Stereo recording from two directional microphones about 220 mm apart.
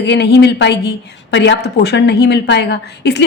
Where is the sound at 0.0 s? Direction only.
50° left (ahead or behind).